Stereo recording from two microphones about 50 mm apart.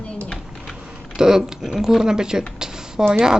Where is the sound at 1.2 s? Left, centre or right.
Centre.